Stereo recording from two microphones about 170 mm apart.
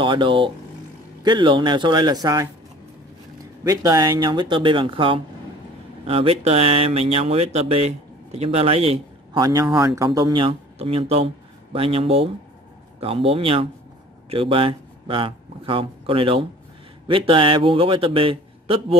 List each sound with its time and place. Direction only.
0.0 s speech: 30° right (ahead or behind)
3.6 s speech: 20° right (ahead or behind)
9.4 s speech: 20° right (ahead or behind)